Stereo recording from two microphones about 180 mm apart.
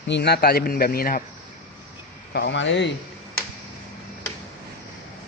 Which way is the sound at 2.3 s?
75° left (ahead or behind).